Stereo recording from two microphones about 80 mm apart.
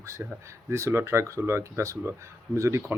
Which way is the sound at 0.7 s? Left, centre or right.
Right.